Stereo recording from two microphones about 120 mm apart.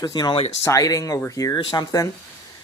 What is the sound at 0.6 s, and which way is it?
Speech, 30° left (ahead or behind).